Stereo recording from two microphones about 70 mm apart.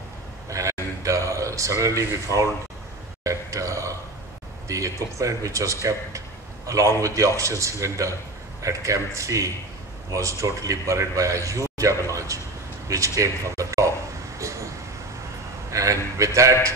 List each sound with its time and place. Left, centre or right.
0.5 s a sound: right
4.6 s a man's voice: right
14.4 s vehicle: right
15.7 s a man's voice: right